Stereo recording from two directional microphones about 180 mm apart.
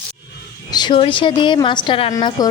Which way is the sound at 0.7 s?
25° left (ahead or behind).